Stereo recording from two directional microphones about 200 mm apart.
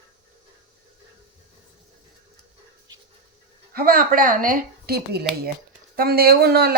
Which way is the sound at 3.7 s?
45° right (ahead or behind).